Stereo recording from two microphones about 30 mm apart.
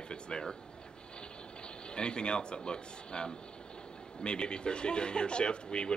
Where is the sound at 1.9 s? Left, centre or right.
Left.